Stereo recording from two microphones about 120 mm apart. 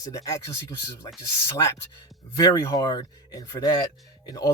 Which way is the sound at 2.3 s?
30° left (ahead or behind).